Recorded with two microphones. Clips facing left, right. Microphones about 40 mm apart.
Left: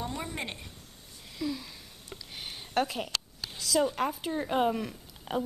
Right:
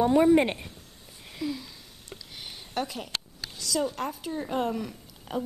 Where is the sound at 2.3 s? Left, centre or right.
Centre.